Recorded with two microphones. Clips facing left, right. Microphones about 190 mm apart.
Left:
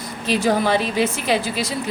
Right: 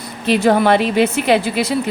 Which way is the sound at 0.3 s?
60° right (ahead or behind).